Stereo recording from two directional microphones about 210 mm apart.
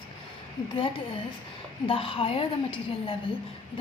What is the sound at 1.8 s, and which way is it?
A woman's voice, 25° left (ahead or behind).